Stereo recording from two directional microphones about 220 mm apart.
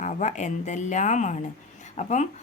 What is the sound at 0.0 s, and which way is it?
Speech, 35° left (ahead or behind).